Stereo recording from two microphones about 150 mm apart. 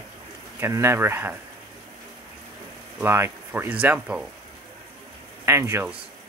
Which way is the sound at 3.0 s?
15° right (ahead or behind).